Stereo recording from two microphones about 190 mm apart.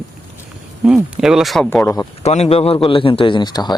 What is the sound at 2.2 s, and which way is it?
Speech, 35° left (ahead or behind).